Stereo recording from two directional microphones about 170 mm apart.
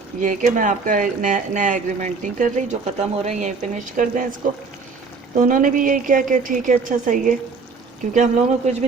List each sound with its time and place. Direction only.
0.2 s speech: 45° right (ahead or behind)